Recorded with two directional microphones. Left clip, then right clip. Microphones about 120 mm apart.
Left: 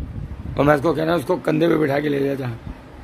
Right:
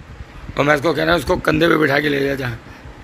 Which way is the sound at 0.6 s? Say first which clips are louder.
Right 1 dB; 35° left (ahead or behind).